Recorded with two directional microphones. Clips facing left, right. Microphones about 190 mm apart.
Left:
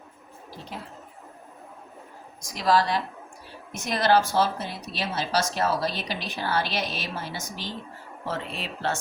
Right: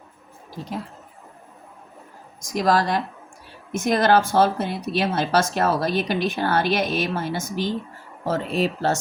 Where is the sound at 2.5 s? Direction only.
45° right (ahead or behind).